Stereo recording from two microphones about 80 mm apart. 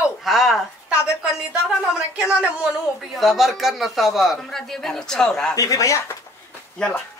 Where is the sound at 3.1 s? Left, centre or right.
Centre.